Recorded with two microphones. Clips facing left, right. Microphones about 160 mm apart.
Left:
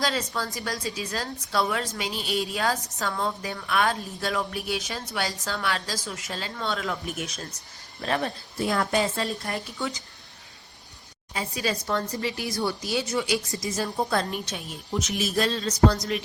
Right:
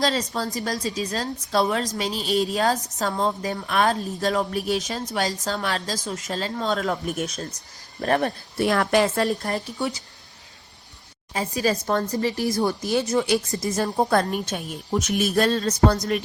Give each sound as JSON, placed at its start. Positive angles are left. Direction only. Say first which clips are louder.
{"t": 0.0, "sound": "speech", "louder": "right 4 dB", "side_deg": -40}
{"t": 11.3, "sound": "speech", "louder": "right 5 dB", "side_deg": -40}